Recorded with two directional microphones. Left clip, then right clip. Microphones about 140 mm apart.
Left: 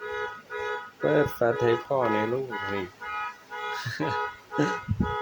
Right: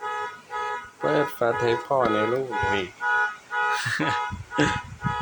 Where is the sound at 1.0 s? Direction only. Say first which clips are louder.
Right 1 dB; 25° left (ahead or behind).